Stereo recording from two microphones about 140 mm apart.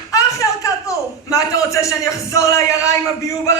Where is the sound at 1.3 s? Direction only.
20° left (ahead or behind).